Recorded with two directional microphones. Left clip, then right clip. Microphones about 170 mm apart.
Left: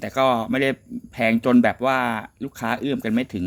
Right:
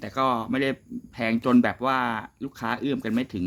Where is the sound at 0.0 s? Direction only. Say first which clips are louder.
Left 5 dB; 15° left (ahead or behind).